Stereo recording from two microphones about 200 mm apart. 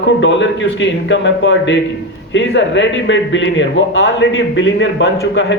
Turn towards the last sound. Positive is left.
turn(degrees=65)  # may be behind; listen again after turning